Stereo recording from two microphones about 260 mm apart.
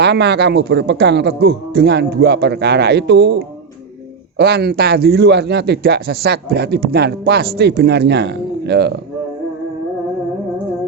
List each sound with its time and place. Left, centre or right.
0.0 s speech: right